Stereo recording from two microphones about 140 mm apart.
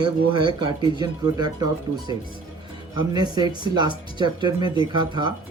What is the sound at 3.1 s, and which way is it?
Speech, 30° right (ahead or behind).